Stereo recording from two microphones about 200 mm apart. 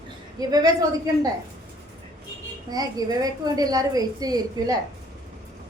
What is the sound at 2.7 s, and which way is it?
A woman's voice, 20° right (ahead or behind).